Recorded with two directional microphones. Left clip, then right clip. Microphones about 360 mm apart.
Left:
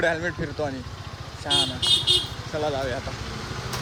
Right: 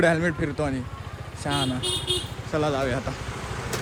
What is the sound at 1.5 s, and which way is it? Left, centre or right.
Speech, right.